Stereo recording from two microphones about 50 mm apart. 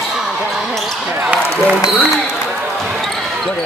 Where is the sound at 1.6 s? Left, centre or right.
Right.